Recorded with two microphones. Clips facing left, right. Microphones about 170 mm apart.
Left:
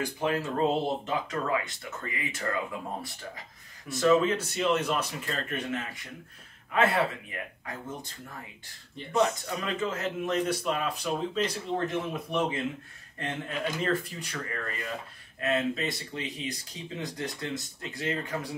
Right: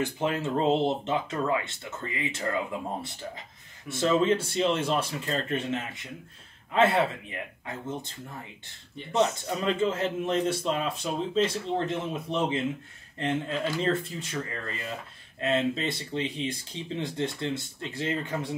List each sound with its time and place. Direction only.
0.0 s a man's voice: 25° right (ahead or behind)
3.9 s a man's voice: 25° right (ahead or behind)
9.1 s a man's voice: 25° right (ahead or behind)